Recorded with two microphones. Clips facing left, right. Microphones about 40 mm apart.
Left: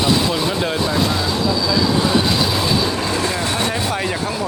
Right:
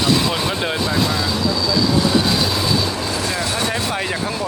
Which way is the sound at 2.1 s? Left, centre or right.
Centre.